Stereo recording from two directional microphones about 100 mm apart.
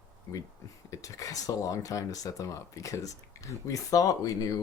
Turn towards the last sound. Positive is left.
turn(degrees=35)  # may be behind; listen again after turning